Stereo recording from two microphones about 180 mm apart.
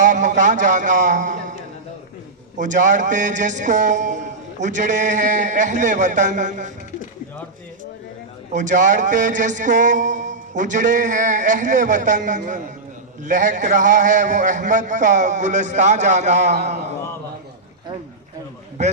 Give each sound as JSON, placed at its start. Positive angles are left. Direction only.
{"t": 0.0, "sound": "a sound", "side_deg": -45}
{"t": 2.6, "sound": "a man's voice", "side_deg": -45}
{"t": 8.5, "sound": "a man's voice", "side_deg": -45}